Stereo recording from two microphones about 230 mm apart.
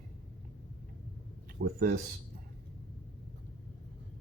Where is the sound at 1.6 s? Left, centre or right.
Right.